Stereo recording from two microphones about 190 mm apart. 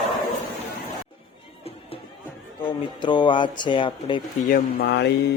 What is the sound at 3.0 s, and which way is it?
Speech, 25° left (ahead or behind).